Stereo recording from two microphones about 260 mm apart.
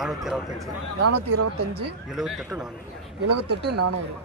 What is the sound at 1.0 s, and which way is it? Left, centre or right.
Speech, right.